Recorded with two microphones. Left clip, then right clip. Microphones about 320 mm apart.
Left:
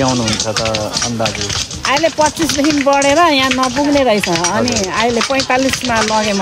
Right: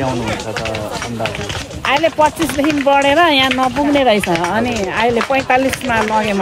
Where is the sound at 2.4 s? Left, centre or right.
Right.